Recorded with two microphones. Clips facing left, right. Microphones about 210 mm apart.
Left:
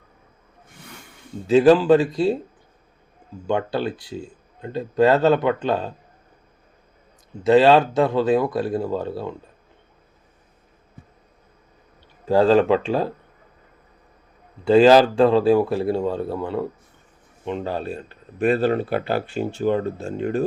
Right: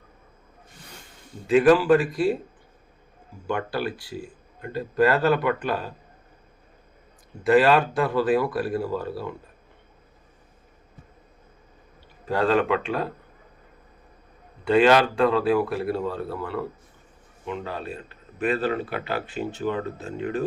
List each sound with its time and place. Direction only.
1.5 s speech: 25° left (ahead or behind)
3.4 s speech: 25° left (ahead or behind)
7.4 s speech: 25° left (ahead or behind)
12.3 s speech: 30° left (ahead or behind)
14.6 s speech: 30° left (ahead or behind)